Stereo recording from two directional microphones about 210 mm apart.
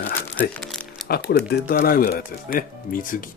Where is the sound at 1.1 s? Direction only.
45° left (ahead or behind).